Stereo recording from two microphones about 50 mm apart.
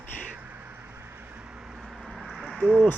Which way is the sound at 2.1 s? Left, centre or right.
Centre.